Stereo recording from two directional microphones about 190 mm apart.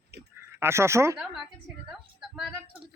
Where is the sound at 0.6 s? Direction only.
15° right (ahead or behind).